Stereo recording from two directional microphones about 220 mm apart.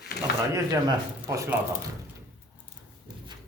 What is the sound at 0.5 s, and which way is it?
Speech, 15° right (ahead or behind).